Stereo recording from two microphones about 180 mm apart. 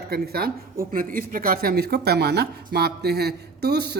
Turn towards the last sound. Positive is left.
turn(degrees=-65)  # may be behind; listen again after turning